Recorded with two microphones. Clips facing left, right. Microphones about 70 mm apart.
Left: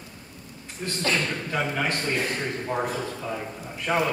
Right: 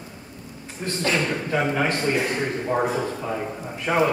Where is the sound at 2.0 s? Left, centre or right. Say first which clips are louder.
Right 4 dB; centre.